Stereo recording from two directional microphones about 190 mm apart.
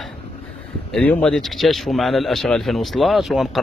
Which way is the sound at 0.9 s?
5° left (ahead or behind).